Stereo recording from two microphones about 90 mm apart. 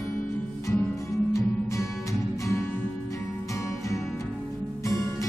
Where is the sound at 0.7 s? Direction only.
30° left (ahead or behind).